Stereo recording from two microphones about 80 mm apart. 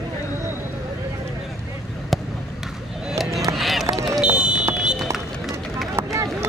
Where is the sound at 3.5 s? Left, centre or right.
Centre.